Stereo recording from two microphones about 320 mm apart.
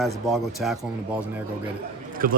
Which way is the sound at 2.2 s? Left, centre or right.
Right.